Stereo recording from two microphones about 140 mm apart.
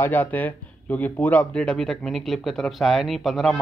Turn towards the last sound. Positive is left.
turn(degrees=0)  # may be behind; listen again after turning